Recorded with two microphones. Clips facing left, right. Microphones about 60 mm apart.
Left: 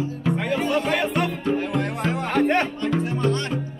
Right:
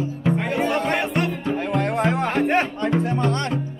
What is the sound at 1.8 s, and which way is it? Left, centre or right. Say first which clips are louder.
Music: right 4 dB; right.